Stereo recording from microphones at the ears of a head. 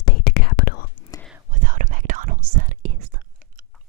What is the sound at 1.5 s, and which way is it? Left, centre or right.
Whispering, right.